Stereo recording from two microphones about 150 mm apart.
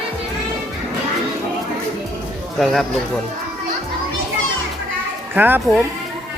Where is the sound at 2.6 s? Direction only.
Centre (ahead or behind).